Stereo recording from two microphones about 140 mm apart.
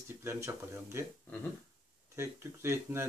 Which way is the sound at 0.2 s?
15° right (ahead or behind).